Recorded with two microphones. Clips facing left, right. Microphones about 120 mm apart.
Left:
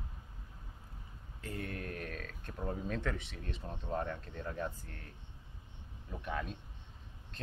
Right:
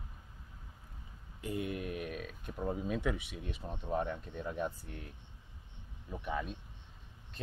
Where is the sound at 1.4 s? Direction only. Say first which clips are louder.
Right 4 dB; 15° right (ahead or behind).